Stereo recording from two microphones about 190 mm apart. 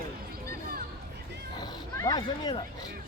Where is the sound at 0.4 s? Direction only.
50° right (ahead or behind).